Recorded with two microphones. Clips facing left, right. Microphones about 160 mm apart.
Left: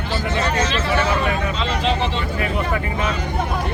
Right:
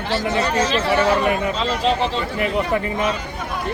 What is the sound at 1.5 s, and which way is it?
Speech, 35° right (ahead or behind).